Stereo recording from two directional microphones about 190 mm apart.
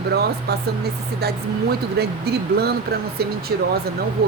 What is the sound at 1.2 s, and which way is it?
Speech, 55° right (ahead or behind).